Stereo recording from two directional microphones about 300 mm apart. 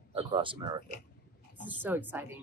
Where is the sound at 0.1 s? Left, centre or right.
Centre.